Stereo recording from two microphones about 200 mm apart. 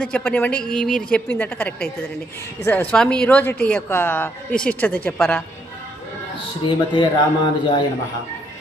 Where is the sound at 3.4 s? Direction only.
50° left (ahead or behind).